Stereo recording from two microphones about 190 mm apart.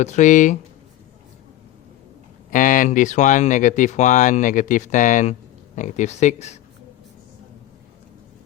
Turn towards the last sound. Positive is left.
turn(degrees=35)  # may be behind; listen again after turning